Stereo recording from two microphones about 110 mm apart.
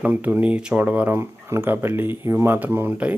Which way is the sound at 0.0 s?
15° right (ahead or behind).